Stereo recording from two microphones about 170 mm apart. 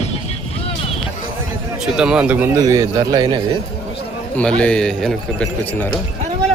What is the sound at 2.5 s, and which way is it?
Speech, 20° right (ahead or behind).